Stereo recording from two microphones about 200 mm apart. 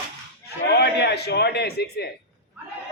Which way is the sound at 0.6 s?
55° left (ahead or behind).